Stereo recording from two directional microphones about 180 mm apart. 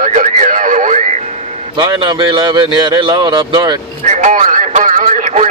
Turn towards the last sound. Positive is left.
turn(degrees=-45)  # may be behind; listen again after turning